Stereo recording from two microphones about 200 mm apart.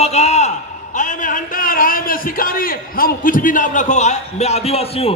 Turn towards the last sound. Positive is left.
turn(degrees=30)  # may be behind; listen again after turning